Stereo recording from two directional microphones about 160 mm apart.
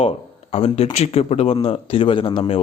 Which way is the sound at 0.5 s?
40° left (ahead or behind).